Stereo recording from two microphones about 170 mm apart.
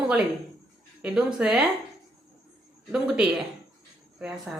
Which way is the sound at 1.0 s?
5° right (ahead or behind).